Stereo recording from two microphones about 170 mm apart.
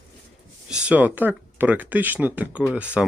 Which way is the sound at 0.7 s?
5° right (ahead or behind).